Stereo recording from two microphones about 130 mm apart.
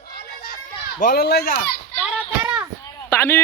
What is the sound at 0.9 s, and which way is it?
Speech, 90° left.